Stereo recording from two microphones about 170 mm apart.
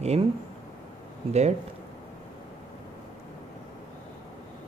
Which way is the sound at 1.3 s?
40° right (ahead or behind).